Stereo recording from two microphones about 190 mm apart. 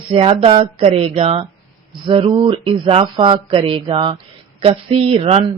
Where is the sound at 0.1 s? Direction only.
30° right (ahead or behind).